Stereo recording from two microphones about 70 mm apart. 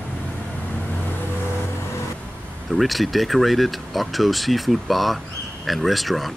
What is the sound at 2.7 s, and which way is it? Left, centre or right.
Speech, centre.